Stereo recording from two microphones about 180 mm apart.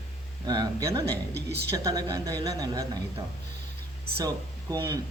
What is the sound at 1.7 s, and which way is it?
A woman's voice, 20° right (ahead or behind).